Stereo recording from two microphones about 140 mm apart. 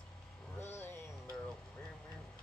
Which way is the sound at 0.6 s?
15° left (ahead or behind).